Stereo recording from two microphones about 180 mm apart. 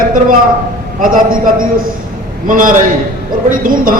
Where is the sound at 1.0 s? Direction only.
50° right (ahead or behind).